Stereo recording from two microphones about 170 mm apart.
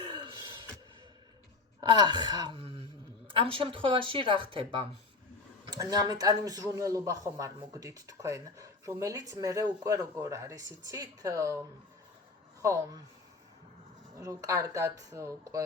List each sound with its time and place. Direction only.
0.1 s gasp: 25° right (ahead or behind)
1.8 s speech: 25° right (ahead or behind)
12.6 s speech: 20° right (ahead or behind)
14.2 s speech: 20° right (ahead or behind)